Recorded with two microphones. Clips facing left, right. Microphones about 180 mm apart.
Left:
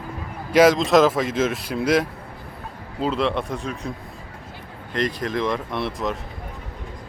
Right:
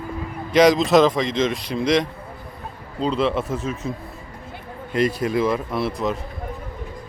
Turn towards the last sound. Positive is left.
turn(degrees=0)  # may be behind; listen again after turning